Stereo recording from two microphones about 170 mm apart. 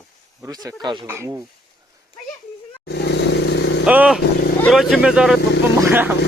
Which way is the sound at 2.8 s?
75° left (ahead or behind).